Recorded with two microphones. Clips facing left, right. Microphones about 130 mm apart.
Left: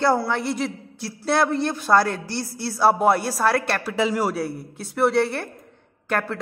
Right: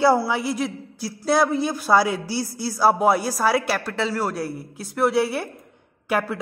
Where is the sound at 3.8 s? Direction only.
10° left (ahead or behind).